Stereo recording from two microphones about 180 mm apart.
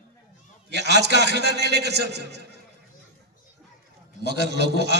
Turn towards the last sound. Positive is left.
turn(degrees=-65)  # may be behind; listen again after turning